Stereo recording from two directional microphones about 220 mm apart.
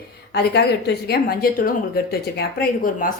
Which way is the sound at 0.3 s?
45° left (ahead or behind).